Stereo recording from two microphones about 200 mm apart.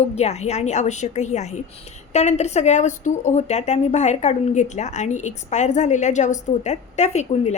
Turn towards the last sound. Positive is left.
turn(degrees=35)  # may be behind; listen again after turning